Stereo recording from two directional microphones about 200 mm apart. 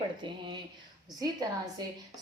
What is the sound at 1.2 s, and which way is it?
Speech, 20° right (ahead or behind).